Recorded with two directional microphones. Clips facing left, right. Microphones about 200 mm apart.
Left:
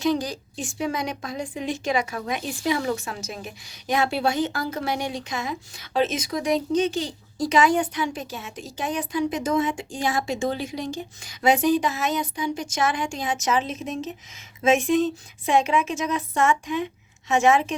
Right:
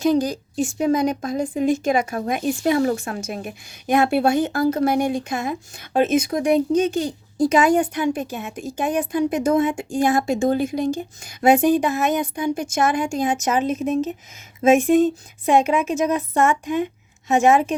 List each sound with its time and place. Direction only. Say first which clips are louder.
0.0 s a woman's voice: right 5 dB; 45° right (ahead or behind)